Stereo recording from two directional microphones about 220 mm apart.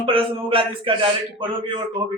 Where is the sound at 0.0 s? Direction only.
25° right (ahead or behind).